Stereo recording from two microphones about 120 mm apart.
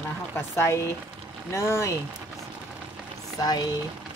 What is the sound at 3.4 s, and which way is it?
Speech, 35° left (ahead or behind).